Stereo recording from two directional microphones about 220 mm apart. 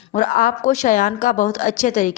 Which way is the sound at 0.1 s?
35° left (ahead or behind).